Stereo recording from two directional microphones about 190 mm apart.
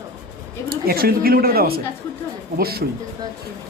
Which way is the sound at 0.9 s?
55° right (ahead or behind).